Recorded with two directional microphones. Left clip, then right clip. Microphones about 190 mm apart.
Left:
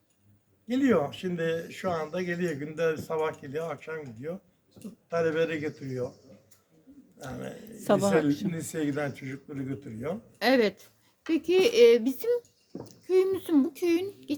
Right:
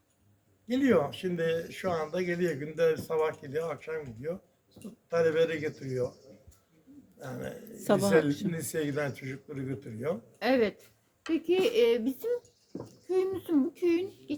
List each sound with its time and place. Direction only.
0.7 s speech: centre (ahead or behind)
7.2 s speech: 5° right (ahead or behind)
10.3 s speech: 60° left (ahead or behind)